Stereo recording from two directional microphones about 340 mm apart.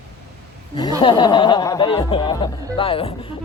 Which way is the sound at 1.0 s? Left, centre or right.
Centre.